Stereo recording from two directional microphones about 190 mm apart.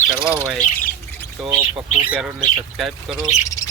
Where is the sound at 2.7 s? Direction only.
Centre (ahead or behind).